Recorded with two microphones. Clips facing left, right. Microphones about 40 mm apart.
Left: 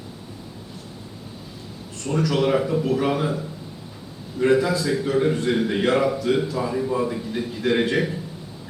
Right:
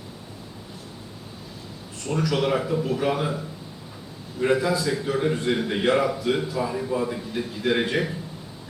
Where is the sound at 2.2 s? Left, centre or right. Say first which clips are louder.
Left 3 dB; centre.